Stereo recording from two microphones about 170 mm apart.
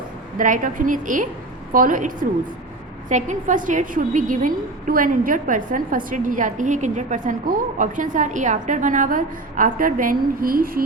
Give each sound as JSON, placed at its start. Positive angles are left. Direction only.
{"t": 0.3, "sound": "a woman's voice", "side_deg": -50}